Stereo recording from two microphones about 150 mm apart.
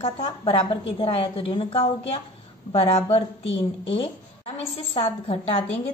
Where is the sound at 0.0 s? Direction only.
35° left (ahead or behind).